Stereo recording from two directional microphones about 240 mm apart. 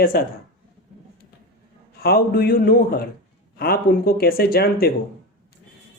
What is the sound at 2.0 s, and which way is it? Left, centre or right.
A man's voice, left.